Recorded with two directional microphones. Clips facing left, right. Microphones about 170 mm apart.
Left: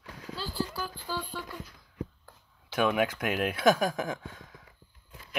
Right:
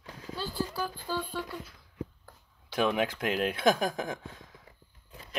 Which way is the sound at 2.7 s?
30° right (ahead or behind).